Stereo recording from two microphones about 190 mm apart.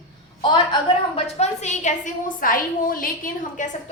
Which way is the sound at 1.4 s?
40° left (ahead or behind).